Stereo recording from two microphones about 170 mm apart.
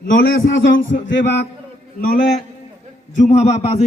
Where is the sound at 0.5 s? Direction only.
90° left.